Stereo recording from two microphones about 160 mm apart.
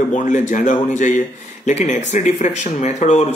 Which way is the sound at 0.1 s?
55° left (ahead or behind).